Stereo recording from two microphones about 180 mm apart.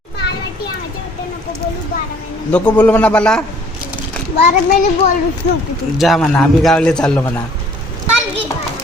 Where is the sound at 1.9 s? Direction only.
60° left (ahead or behind).